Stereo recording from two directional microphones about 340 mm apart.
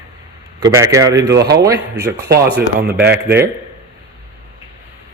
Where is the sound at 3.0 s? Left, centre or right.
Right.